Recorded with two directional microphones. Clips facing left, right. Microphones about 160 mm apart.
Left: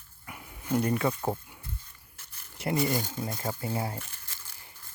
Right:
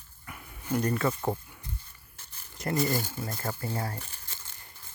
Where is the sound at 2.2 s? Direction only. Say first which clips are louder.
Right 2 dB; 30° right (ahead or behind).